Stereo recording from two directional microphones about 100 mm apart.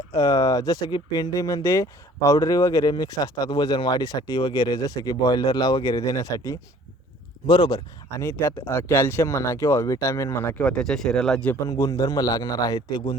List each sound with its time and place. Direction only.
0.1 s speech: 35° left (ahead or behind)
7.4 s speech: 50° left (ahead or behind)
8.2 s speech: 25° left (ahead or behind)
10.6 s speech: 10° left (ahead or behind)
11.6 s speech: 35° left (ahead or behind)